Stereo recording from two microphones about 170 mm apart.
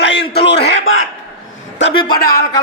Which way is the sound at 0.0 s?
85° left.